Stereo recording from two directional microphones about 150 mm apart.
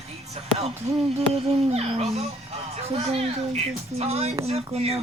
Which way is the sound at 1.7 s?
45° right (ahead or behind).